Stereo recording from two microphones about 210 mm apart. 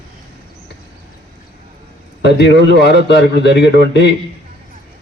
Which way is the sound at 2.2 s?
55° left (ahead or behind).